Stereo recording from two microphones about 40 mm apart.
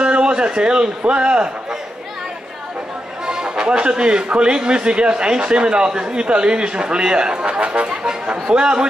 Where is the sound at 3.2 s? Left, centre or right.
Centre.